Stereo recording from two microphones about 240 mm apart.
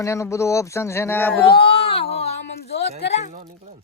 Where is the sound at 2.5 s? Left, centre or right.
Left.